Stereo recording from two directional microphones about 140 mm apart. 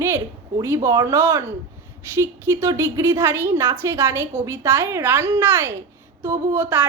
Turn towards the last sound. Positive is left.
turn(degrees=-15)  # may be behind; listen again after turning